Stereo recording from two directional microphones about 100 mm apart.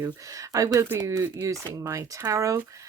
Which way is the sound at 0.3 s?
35° right (ahead or behind).